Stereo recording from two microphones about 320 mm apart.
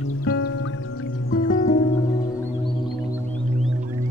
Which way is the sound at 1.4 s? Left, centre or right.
Left.